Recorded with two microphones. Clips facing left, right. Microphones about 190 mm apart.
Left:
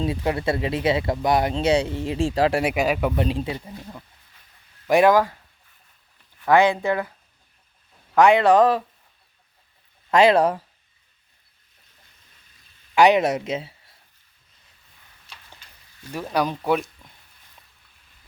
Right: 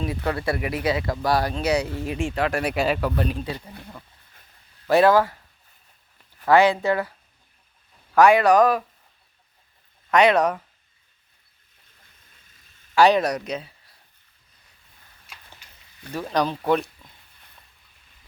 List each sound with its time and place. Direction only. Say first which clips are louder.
0.0 s speech: left 2 dB; 25° left (ahead or behind)
2.8 s speech: left 1 dB; 10° left (ahead or behind)
4.9 s speech: even; 15° left (ahead or behind)
6.5 s speech: even; 15° left (ahead or behind)
8.1 s speech: even; 20° left (ahead or behind)
10.1 s speech: left 2 dB; 30° left (ahead or behind)
12.9 s speech: left 1 dB; 20° left (ahead or behind)
16.1 s speech: even; 10° left (ahead or behind)